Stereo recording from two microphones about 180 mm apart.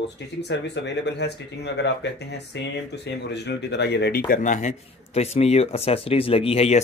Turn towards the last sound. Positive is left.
turn(degrees=35)  # may be behind; listen again after turning